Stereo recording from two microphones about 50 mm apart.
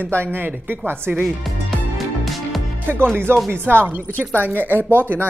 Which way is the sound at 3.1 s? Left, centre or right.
Right.